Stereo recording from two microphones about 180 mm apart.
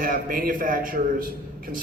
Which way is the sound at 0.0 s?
55° right (ahead or behind).